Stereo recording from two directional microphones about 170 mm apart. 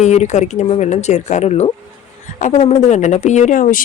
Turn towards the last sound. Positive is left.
turn(degrees=50)  # may be behind; listen again after turning